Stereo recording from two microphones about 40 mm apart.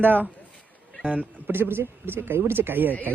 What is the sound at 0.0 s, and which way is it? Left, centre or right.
Speech, right.